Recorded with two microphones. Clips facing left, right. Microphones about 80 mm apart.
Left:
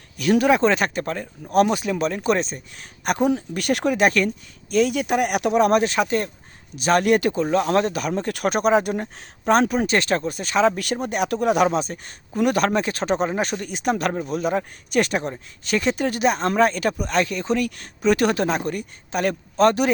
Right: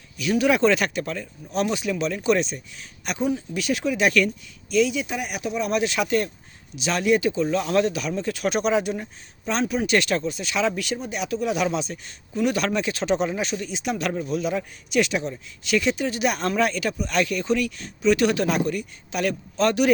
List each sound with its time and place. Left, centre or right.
0.2 s speech: left
0.5 s speech: left
1.5 s speech: left
5.8 s speech: left
6.7 s speech: left
16.2 s speech: left